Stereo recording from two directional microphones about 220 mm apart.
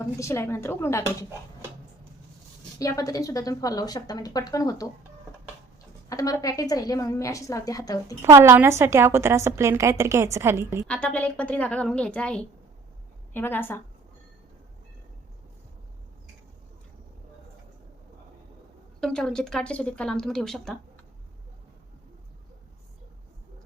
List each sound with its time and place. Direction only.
0.0 s a woman's voice: 15° left (ahead or behind)
2.7 s a woman's voice: 15° left (ahead or behind)
6.1 s a woman's voice: 15° left (ahead or behind)
8.2 s a woman's voice: 10° right (ahead or behind)
10.8 s a woman's voice: 5° left (ahead or behind)
18.9 s speech: centre (ahead or behind)